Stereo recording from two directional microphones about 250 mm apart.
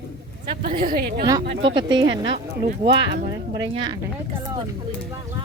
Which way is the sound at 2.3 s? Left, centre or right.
Right.